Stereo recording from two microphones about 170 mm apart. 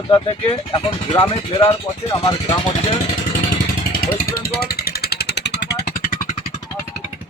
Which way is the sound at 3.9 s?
60° left (ahead or behind).